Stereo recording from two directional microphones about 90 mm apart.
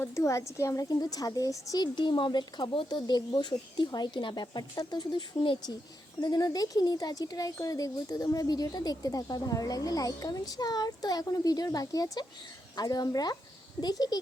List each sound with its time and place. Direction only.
0.0 s a woman's voice: 35° left (ahead or behind)
0.9 s speech: 45° left (ahead or behind)
1.7 s speech: 55° left (ahead or behind)